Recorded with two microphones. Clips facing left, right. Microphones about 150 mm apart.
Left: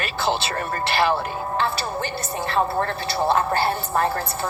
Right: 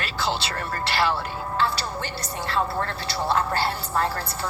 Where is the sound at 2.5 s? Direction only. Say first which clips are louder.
Left 4 dB; 30° left (ahead or behind).